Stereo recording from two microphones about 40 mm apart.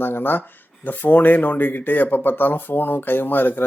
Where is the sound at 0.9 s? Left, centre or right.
Left.